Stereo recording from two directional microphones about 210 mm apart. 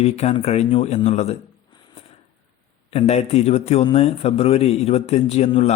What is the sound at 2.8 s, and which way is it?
A man's voice, 30° left (ahead or behind).